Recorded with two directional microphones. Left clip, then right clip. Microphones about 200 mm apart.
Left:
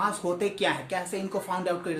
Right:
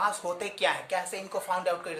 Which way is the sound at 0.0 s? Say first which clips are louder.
Left 2 dB; 20° right (ahead or behind).